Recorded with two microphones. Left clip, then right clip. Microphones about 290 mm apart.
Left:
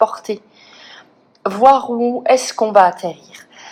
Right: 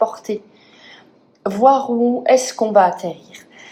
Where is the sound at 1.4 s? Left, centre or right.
Centre.